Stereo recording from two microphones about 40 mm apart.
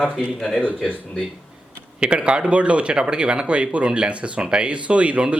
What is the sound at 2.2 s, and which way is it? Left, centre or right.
Speech, right.